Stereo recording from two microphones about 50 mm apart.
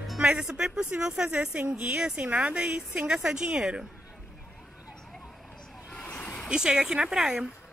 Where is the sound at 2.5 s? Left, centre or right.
Right.